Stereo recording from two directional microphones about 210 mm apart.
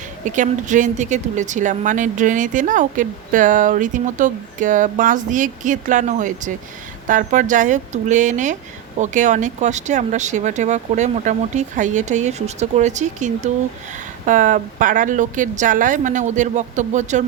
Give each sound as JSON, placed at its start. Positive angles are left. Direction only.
{"t": 0.3, "sound": "speech", "side_deg": -35}